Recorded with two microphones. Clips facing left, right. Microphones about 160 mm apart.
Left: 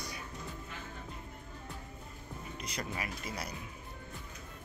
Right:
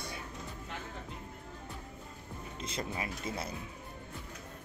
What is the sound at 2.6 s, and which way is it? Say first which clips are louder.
Speech: right 3 dB; 25° right (ahead or behind).